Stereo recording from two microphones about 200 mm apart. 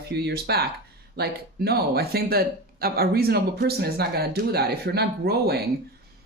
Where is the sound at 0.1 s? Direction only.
55° right (ahead or behind).